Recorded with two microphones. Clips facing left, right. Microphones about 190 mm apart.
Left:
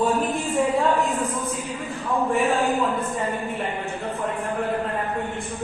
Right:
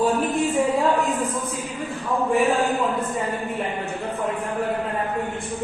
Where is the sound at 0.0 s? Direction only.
Centre (ahead or behind).